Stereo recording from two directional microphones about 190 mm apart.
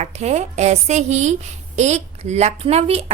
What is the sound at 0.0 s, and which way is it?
A woman's voice, 35° right (ahead or behind).